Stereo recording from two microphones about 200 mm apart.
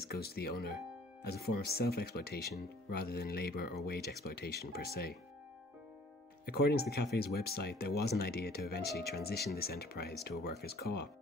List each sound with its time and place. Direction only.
0.0 s speech: 50° left (ahead or behind)
6.4 s speech: 50° left (ahead or behind)